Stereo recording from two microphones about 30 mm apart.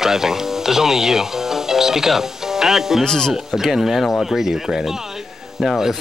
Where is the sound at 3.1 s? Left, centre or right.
Left.